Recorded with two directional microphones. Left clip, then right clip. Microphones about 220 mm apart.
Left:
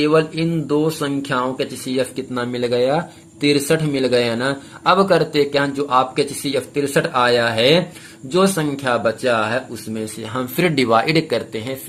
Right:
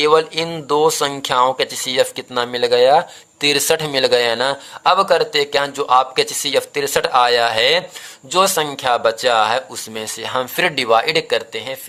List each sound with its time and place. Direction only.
0.0 s speech: 40° right (ahead or behind); by 11.8 s 20° right (ahead or behind)